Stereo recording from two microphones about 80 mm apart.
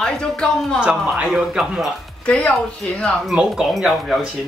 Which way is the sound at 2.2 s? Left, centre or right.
Centre.